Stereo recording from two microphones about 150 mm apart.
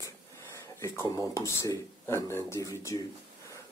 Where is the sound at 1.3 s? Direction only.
20° left (ahead or behind).